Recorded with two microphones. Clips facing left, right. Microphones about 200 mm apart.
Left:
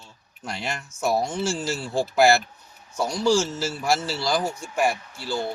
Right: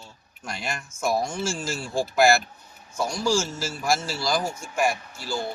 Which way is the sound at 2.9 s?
20° left (ahead or behind).